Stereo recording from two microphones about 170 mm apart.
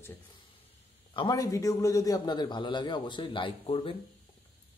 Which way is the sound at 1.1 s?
25° left (ahead or behind).